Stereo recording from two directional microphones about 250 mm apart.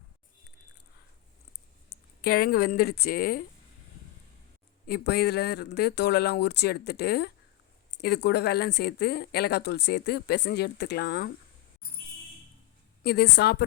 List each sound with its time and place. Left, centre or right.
1.9 s speech: left
4.9 s a woman's voice: left
13.0 s a woman's voice: left